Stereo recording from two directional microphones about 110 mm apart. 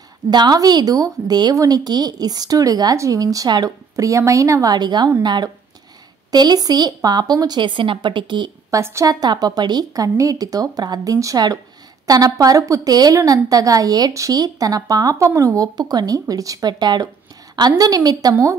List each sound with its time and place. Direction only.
0.3 s a woman's voice: 40° right (ahead or behind)
8.6 s a woman's voice: 25° right (ahead or behind)